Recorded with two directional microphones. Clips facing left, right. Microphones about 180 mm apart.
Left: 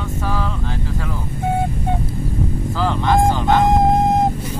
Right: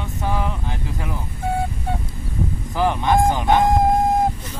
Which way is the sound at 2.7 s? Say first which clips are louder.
Even; 15° right (ahead or behind).